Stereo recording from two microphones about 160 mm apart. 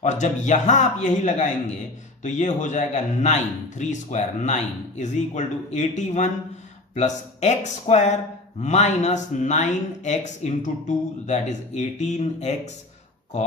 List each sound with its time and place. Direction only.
0.0 s a man's voice: 50° left (ahead or behind)